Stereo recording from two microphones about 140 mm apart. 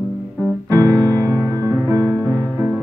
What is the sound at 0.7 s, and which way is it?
Music, 20° right (ahead or behind).